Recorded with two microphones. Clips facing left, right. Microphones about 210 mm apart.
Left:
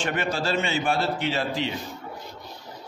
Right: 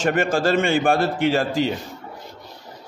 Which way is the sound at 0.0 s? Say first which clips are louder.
Right 7 dB; 45° right (ahead or behind).